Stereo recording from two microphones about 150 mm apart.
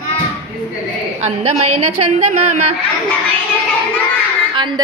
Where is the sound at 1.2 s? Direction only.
50° right (ahead or behind).